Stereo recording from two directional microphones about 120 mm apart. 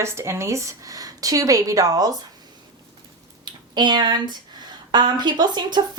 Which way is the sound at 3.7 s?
35° right (ahead or behind).